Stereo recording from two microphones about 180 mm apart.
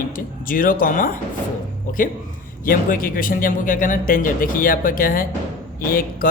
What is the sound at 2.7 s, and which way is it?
Speech, 50° left (ahead or behind).